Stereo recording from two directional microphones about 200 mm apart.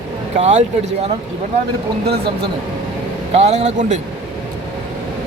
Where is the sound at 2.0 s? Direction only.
50° right (ahead or behind).